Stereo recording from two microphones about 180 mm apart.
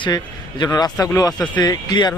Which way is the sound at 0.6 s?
20° left (ahead or behind).